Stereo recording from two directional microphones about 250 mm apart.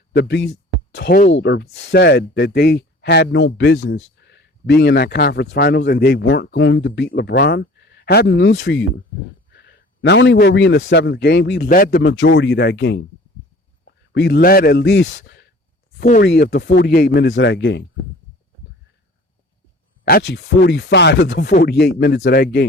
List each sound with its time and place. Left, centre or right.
0.1 s a man's voice: left
20.1 s speech: left